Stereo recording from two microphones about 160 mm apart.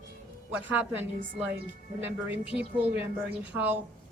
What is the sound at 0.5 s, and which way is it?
A woman's voice, 10° right (ahead or behind).